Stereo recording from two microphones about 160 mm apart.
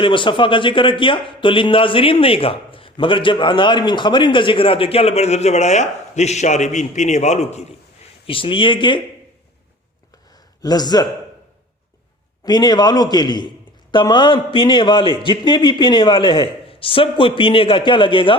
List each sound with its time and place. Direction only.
0.0 s a man's voice: 30° left (ahead or behind)
8.3 s a man's voice: 35° left (ahead or behind)
10.6 s a man's voice: 25° left (ahead or behind)
12.5 s a man's voice: 25° left (ahead or behind)